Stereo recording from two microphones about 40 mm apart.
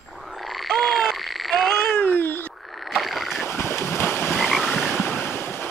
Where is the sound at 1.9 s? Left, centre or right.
Left.